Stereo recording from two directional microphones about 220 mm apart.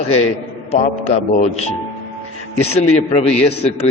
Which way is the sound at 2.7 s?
30° left (ahead or behind).